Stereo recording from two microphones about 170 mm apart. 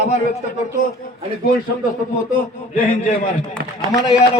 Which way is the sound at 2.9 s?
45° left (ahead or behind).